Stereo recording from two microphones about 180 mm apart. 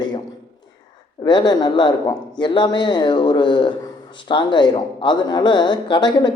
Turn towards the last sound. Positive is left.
turn(degrees=25)  # may be behind; listen again after turning